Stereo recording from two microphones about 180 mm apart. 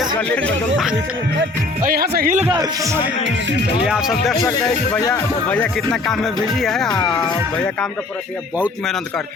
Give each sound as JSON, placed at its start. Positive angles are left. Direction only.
{"t": 0.2, "sound": "speech", "side_deg": 5}
{"t": 1.8, "sound": "speech", "side_deg": -55}
{"t": 2.5, "sound": "a man's voice", "side_deg": -20}
{"t": 3.8, "sound": "music", "side_deg": -5}
{"t": 4.4, "sound": "speech", "side_deg": 20}
{"t": 5.1, "sound": "speech", "side_deg": 10}
{"t": 5.9, "sound": "music", "side_deg": 0}
{"t": 7.0, "sound": "speech", "side_deg": 25}
{"t": 7.5, "sound": "speech", "side_deg": 5}